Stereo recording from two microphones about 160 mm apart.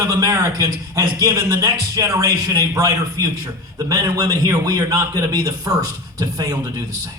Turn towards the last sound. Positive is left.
turn(degrees=-25)  # may be behind; listen again after turning